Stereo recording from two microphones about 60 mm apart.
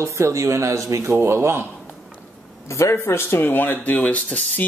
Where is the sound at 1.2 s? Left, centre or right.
Right.